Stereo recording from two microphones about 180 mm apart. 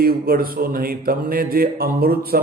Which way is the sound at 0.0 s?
55° right (ahead or behind).